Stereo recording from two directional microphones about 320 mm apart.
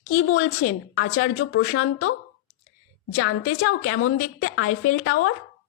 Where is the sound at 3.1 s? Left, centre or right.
Left.